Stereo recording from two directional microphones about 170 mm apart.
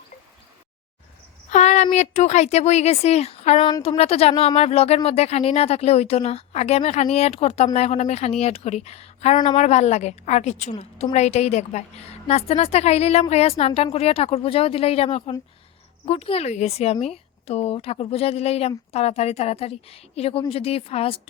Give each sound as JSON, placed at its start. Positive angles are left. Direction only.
{"t": 1.5, "sound": "a woman's voice", "side_deg": 40}